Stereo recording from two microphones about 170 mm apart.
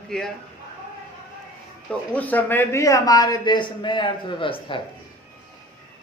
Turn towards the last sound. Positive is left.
turn(degrees=30)  # may be behind; listen again after turning